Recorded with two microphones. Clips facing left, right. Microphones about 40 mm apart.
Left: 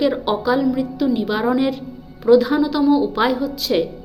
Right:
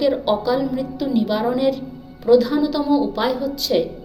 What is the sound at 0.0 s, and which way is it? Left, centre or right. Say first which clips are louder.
Speech: even; centre.